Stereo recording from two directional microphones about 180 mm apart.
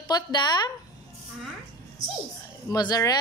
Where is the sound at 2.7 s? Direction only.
20° left (ahead or behind).